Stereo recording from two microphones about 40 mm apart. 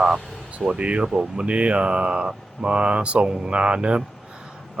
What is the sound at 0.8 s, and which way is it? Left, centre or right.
Speech, right.